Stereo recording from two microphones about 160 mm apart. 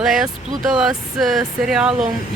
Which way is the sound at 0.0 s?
5° right (ahead or behind).